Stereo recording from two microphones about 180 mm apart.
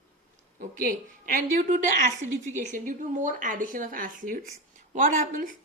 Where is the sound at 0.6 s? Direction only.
50° right (ahead or behind).